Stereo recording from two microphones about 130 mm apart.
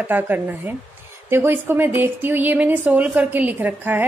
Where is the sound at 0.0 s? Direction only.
15° right (ahead or behind).